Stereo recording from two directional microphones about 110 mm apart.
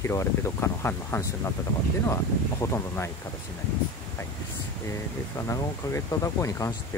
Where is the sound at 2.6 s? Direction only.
25° left (ahead or behind).